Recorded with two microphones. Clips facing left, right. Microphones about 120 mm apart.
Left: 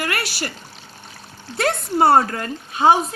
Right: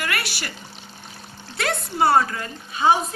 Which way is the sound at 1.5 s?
40° left (ahead or behind).